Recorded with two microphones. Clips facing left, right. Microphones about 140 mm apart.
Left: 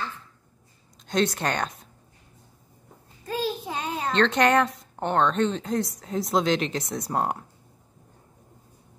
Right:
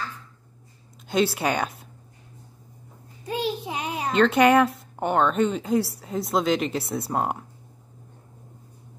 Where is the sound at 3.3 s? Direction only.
15° right (ahead or behind).